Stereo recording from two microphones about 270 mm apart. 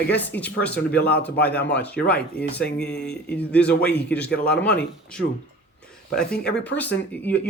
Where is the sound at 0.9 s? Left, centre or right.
Left.